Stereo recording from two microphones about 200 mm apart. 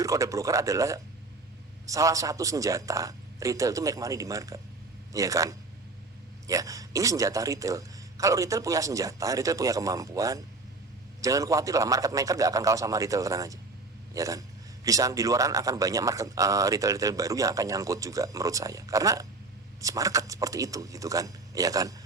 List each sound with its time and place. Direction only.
0.0 s a man's voice: 15° right (ahead or behind)